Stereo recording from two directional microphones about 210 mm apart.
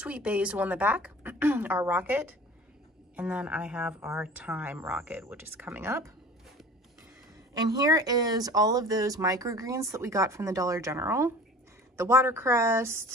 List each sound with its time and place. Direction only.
0.0 s speech: 5° right (ahead or behind)
7.5 s speech: 20° right (ahead or behind)